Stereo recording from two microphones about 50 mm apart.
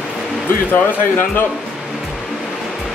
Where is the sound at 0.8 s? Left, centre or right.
Left.